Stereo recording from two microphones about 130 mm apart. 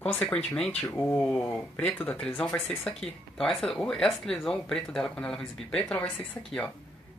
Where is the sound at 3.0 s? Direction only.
5° left (ahead or behind).